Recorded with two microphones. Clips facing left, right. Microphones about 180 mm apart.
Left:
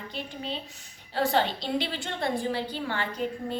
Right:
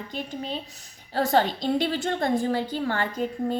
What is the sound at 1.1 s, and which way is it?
A woman's voice, 40° right (ahead or behind).